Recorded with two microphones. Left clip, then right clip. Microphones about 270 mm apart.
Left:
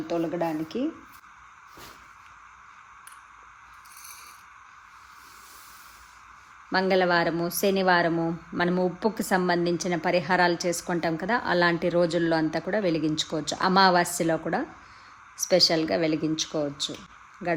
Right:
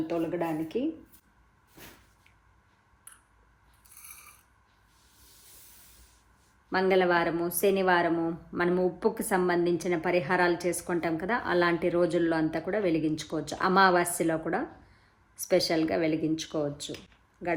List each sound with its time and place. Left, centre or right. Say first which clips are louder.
0.1 s a woman's voice: left 7 dB; left
6.7 s a woman's voice: left 2 dB; left